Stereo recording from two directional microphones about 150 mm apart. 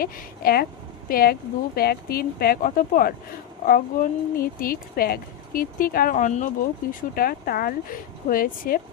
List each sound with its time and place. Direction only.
0.0 s speech: 90° left
3.7 s speech: 65° left (ahead or behind)
7.2 s speech: 80° left